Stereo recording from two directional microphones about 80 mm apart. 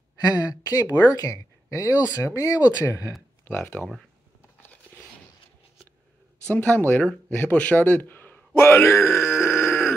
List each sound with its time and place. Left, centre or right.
0.2 s speech: left
3.4 s speech: left
6.5 s a man's voice: left